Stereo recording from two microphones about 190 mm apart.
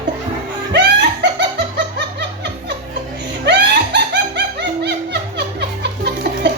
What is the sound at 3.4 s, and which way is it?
Music, 65° right (ahead or behind).